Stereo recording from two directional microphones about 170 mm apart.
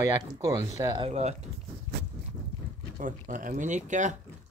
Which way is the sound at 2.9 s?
50° right (ahead or behind).